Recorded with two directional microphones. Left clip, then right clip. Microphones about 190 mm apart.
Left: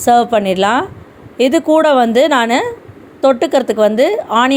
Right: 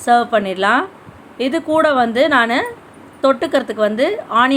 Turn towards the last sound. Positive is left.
turn(degrees=30)  # may be behind; listen again after turning